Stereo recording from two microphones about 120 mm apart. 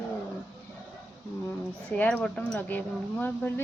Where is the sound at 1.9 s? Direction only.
10° left (ahead or behind).